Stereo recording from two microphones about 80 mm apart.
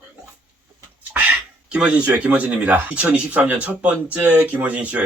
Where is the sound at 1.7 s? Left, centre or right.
Centre.